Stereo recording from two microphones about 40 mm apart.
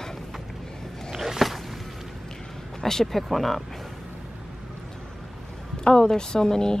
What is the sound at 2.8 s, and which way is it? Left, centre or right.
Speech, centre.